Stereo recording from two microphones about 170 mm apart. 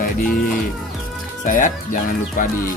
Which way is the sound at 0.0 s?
55° left (ahead or behind).